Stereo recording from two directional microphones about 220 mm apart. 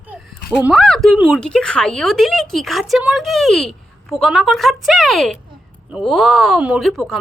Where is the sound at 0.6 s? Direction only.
Centre (ahead or behind).